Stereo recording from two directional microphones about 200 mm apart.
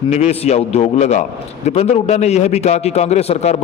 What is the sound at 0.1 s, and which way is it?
A man's voice, 35° left (ahead or behind).